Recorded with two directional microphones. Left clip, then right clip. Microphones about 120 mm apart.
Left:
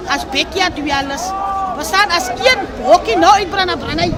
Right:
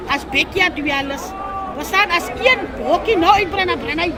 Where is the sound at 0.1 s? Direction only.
30° left (ahead or behind).